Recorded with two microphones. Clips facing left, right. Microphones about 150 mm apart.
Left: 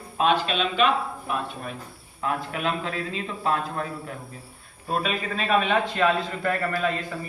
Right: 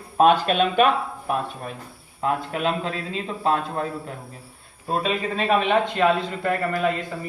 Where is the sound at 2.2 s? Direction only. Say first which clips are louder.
Right 4 dB; 30° right (ahead or behind).